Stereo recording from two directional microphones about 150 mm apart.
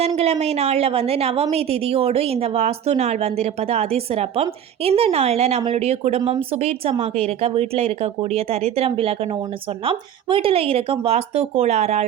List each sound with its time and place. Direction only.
0.2 s a woman's voice: 45° right (ahead or behind)